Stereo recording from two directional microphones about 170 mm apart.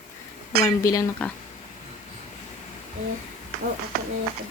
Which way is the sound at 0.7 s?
20° left (ahead or behind).